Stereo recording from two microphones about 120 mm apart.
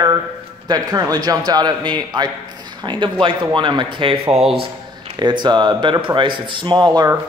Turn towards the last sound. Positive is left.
turn(degrees=-35)  # may be behind; listen again after turning